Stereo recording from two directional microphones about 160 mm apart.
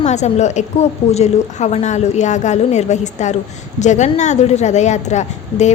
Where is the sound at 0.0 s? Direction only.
45° left (ahead or behind).